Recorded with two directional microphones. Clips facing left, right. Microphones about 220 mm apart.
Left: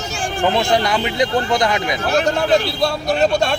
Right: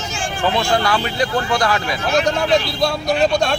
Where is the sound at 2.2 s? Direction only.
5° left (ahead or behind).